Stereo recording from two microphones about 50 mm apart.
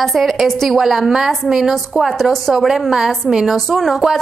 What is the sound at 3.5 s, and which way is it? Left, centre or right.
Speech, centre.